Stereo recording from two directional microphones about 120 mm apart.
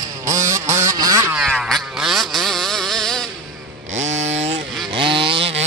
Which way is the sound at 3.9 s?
75° right (ahead or behind).